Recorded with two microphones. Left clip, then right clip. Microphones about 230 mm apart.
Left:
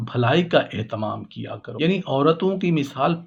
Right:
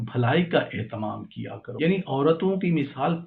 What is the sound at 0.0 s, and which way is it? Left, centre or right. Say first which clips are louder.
Speech: left 4 dB; left.